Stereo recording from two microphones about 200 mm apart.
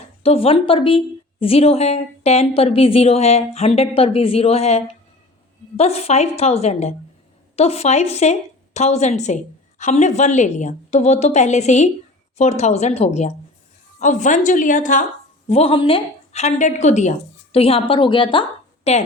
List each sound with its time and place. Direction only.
0.2 s a woman's voice: 30° left (ahead or behind)